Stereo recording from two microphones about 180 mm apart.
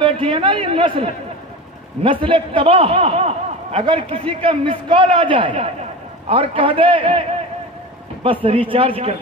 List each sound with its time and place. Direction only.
0.0 s a man's voice: 30° right (ahead or behind)